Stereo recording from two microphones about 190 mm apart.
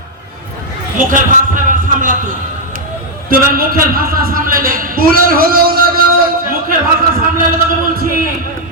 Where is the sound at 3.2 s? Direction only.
50° right (ahead or behind).